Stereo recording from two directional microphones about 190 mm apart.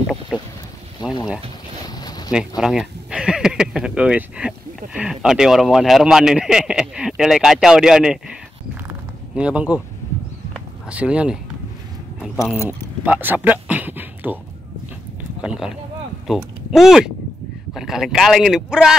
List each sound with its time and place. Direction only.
1.0 s speech: 20° left (ahead or behind)
2.0 s a sound: 20° left (ahead or behind)
2.3 s speech: centre (ahead or behind)
10.9 s speech: 5° right (ahead or behind)
12.6 s speech: 10° right (ahead or behind)
15.4 s speech: 5° right (ahead or behind)